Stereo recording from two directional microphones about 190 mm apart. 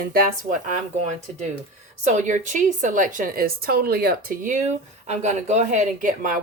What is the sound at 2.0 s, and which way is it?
A woman's voice, 40° right (ahead or behind).